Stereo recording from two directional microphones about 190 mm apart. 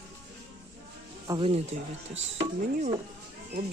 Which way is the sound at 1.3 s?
30° right (ahead or behind).